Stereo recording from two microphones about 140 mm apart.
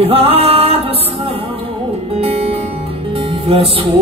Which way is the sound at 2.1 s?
45° right (ahead or behind).